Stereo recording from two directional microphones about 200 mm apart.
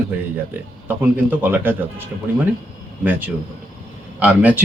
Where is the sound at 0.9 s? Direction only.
10° right (ahead or behind).